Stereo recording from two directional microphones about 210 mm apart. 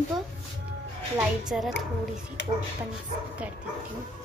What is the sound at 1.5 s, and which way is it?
Speech, 5° right (ahead or behind).